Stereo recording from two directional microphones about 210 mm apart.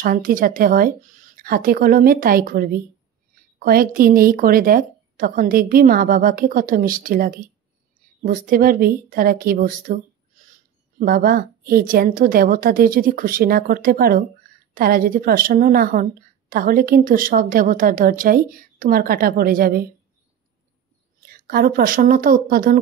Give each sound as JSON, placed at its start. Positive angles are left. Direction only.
{"t": 0.0, "sound": "a woman's voice", "side_deg": -40}
{"t": 21.3, "sound": "a woman's voice", "side_deg": -45}